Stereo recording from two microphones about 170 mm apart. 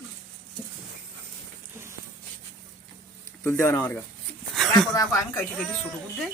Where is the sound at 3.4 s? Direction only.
10° left (ahead or behind).